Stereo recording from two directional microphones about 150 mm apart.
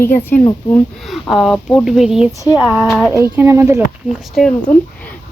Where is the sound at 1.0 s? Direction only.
Centre (ahead or behind).